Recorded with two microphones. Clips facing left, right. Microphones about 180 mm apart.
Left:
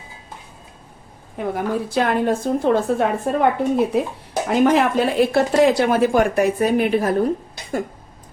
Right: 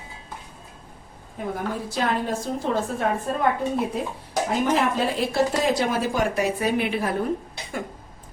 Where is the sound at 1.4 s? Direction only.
75° left (ahead or behind).